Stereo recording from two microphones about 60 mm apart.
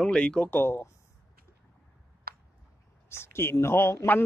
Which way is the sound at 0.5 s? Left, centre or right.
Left.